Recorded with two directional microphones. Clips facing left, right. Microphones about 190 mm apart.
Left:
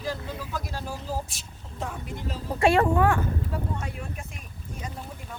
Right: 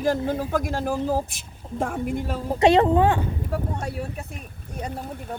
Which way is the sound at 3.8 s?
40° right (ahead or behind).